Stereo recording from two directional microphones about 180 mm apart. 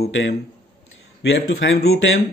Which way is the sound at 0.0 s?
70° left (ahead or behind).